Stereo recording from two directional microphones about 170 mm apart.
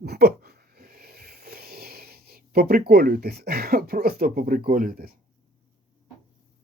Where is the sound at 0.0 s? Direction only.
70° right (ahead or behind).